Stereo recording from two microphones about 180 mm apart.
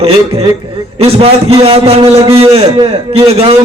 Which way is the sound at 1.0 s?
35° right (ahead or behind).